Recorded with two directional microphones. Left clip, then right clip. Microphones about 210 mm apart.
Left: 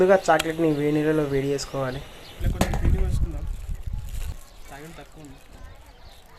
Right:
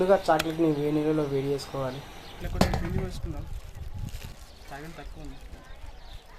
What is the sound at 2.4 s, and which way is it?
Speech, 5° right (ahead or behind).